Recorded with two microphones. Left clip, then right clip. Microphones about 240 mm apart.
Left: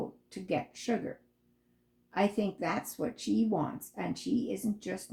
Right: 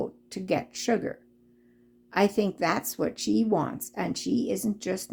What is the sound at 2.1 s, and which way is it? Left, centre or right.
Speech, right.